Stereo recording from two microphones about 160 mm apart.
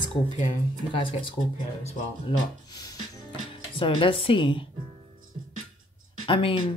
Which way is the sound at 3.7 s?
35° left (ahead or behind).